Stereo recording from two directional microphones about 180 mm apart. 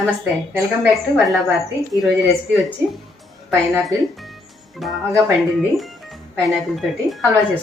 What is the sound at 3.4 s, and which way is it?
A woman's voice, 5° right (ahead or behind).